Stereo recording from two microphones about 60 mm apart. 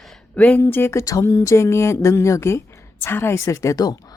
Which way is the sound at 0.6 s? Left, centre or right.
Left.